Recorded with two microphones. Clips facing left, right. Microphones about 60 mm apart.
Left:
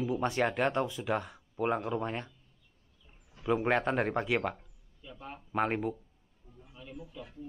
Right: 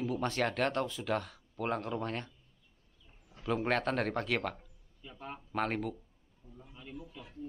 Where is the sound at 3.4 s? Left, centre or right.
Centre.